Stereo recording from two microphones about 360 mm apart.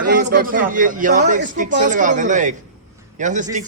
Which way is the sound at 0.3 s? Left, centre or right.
Right.